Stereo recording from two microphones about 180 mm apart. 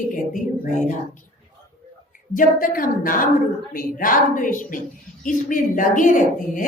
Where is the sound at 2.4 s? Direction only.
50° left (ahead or behind).